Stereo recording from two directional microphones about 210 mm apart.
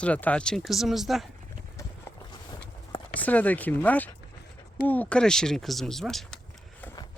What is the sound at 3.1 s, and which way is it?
Speech, 5° left (ahead or behind).